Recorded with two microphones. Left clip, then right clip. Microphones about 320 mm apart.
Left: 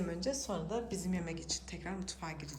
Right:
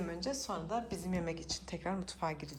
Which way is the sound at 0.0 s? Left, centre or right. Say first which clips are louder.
Left 1 dB; centre.